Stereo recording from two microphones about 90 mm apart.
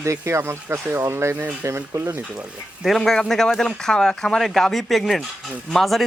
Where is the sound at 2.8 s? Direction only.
5° left (ahead or behind).